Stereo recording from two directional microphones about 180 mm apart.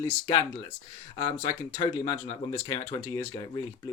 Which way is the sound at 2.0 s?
30° left (ahead or behind).